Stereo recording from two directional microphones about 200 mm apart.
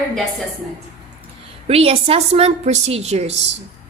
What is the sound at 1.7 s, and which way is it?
A woman's voice, 30° right (ahead or behind).